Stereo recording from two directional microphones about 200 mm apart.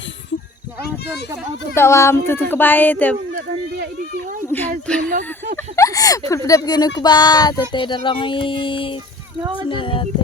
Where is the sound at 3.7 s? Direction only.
45° right (ahead or behind).